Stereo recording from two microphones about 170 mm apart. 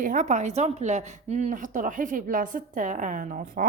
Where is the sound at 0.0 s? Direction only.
50° right (ahead or behind).